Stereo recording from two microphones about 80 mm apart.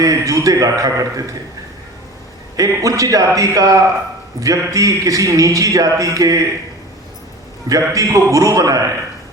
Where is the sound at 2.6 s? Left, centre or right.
Right.